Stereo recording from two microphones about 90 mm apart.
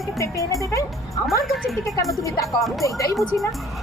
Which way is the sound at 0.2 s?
35° left (ahead or behind).